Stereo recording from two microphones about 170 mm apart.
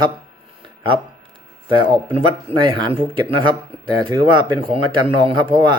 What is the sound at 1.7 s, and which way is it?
Speech, 30° right (ahead or behind).